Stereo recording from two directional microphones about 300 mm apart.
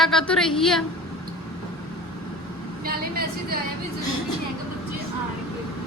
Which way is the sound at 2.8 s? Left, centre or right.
Right.